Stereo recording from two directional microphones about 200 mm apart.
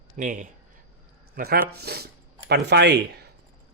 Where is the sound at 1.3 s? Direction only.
55° right (ahead or behind).